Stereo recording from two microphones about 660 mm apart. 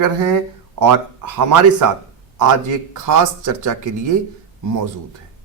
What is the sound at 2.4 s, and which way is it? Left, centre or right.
A man's voice, right.